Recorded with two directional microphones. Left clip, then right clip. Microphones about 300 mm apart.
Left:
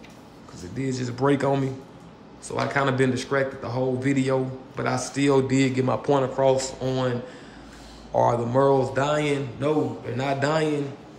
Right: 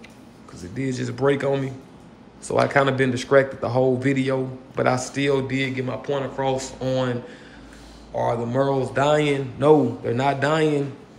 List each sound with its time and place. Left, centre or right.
0.6 s speech: centre
8.2 s speech: centre